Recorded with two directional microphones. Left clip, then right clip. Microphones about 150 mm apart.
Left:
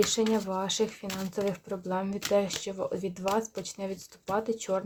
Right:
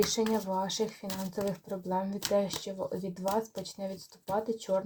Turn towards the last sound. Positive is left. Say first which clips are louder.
# left 1 dB
turn(degrees=30)  # may be behind; listen again after turning